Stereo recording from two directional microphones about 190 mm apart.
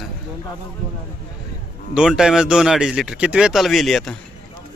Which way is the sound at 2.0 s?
5° right (ahead or behind).